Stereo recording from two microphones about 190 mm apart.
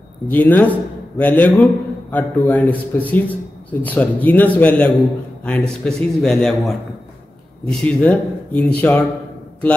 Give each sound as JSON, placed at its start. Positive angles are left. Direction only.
{"t": 0.3, "sound": "a man's voice", "side_deg": 10}
{"t": 7.8, "sound": "speech", "side_deg": 10}